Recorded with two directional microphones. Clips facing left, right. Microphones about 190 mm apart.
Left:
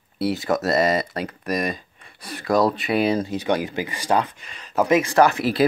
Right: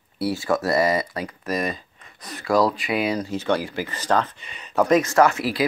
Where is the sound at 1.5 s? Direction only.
15° left (ahead or behind).